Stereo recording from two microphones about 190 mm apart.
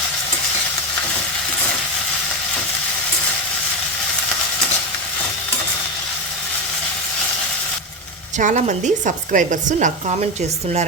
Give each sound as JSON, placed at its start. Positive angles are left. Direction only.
{"t": 8.4, "sound": "a woman's voice", "side_deg": -40}